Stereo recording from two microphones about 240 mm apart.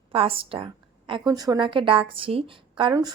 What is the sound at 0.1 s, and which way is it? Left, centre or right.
A woman's voice, right.